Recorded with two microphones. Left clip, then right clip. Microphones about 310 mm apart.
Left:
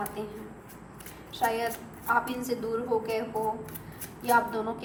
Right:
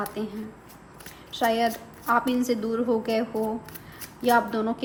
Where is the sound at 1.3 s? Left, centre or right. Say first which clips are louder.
Right 3 dB; right.